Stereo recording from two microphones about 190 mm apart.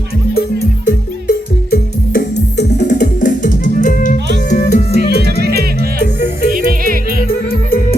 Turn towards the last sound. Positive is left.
turn(degrees=50)  # may be behind; listen again after turning